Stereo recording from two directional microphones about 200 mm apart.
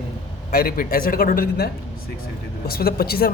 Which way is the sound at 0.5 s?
45° left (ahead or behind).